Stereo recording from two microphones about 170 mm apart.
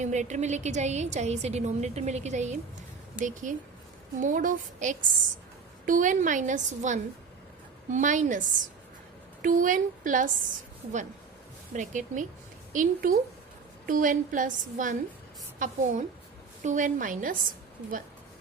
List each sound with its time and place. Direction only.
0.0 s a woman's voice: 45° right (ahead or behind)
11.7 s a woman's voice: 45° right (ahead or behind)